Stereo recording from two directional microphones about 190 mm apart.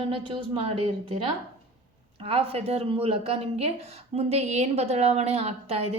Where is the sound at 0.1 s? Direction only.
30° right (ahead or behind).